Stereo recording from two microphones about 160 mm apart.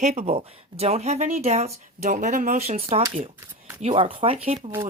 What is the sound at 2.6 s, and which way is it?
A woman's voice, 45° right (ahead or behind).